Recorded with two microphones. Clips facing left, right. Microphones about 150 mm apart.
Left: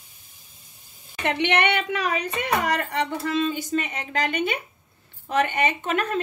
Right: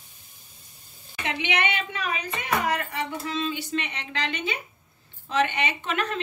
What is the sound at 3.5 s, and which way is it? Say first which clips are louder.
A woman's voice: left 4 dB; 45° left (ahead or behind).